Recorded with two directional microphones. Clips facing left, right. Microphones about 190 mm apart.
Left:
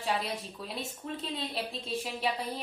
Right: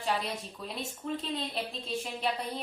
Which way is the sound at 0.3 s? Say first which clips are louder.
Even; centre (ahead or behind).